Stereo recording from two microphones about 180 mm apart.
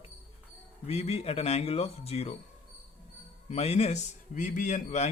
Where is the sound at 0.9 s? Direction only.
35° left (ahead or behind).